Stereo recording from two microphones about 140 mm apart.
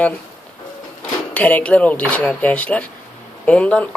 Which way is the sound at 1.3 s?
10° left (ahead or behind).